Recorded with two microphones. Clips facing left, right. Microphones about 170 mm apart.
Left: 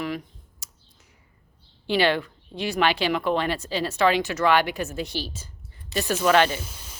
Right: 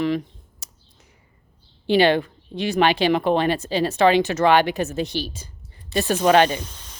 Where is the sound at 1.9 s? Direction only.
20° right (ahead or behind).